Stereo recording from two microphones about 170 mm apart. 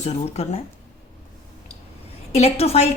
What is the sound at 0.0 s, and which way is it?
Speech, 40° left (ahead or behind).